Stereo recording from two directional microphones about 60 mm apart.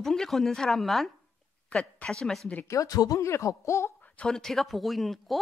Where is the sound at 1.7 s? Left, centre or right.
Centre.